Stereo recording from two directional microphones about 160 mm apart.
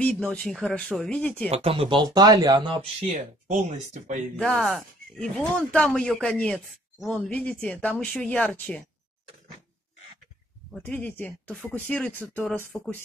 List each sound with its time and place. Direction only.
0.0 s speech: 5° left (ahead or behind)
1.5 s speech: 35° right (ahead or behind)
3.1 s speech: 50° right (ahead or behind)
4.4 s speech: 5° left (ahead or behind)
10.8 s speech: 10° left (ahead or behind)